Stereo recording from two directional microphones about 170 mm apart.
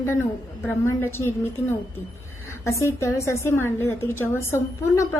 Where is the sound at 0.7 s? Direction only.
15° left (ahead or behind).